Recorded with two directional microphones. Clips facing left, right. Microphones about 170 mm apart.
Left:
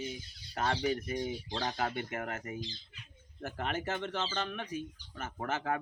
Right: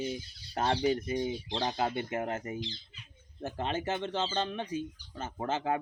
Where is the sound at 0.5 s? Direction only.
30° right (ahead or behind).